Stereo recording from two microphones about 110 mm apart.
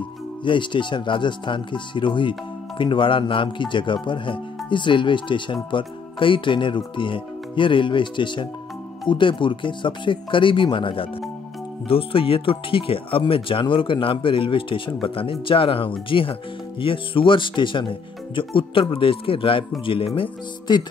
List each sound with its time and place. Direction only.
0.5 s speech: 45° left (ahead or behind)